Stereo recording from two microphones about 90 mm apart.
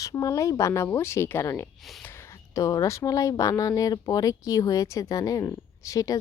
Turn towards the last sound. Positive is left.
turn(degrees=40)  # may be behind; listen again after turning